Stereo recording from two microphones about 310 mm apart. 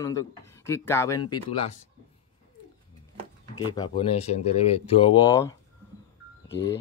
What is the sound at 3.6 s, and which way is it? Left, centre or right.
Speech, centre.